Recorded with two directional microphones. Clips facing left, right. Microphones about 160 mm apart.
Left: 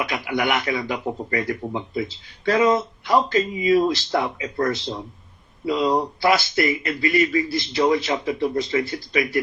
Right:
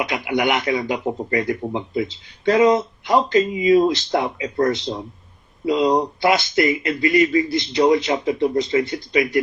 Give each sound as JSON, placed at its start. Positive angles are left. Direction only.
{"t": 0.0, "sound": "a man's voice", "side_deg": -20}